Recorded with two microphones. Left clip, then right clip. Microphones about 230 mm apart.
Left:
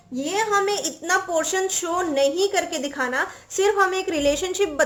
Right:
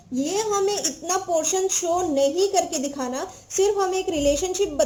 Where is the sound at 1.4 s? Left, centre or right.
Centre.